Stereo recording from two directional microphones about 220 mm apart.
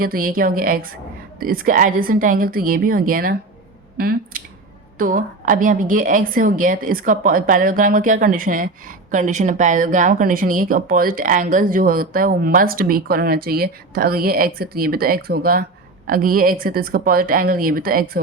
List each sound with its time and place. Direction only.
0.0 s speech: 40° right (ahead or behind)